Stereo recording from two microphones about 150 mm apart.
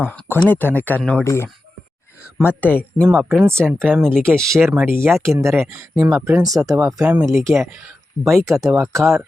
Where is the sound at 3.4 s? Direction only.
15° right (ahead or behind).